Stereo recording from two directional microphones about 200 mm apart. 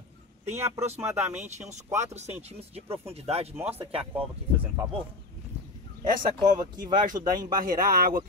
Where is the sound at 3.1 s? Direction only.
30° right (ahead or behind).